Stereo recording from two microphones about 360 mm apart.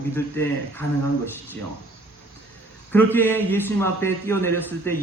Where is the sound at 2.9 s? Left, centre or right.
Centre.